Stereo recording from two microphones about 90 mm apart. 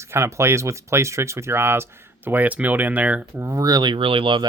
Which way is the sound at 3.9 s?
85° right.